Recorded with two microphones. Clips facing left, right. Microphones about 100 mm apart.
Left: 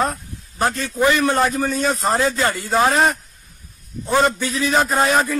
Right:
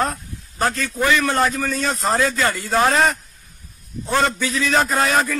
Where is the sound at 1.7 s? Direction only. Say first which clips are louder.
Left 2 dB; 5° left (ahead or behind).